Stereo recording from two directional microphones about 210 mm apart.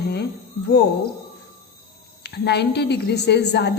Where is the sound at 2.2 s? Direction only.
55° left (ahead or behind).